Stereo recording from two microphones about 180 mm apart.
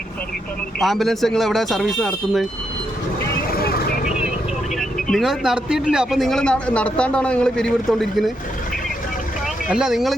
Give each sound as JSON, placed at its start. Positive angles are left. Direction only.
{"t": 0.8, "sound": "a man's voice", "side_deg": 0}
{"t": 3.5, "sound": "vehicle", "side_deg": 60}
{"t": 4.8, "sound": "a man's voice", "side_deg": 0}
{"t": 9.6, "sound": "a man's voice", "side_deg": -5}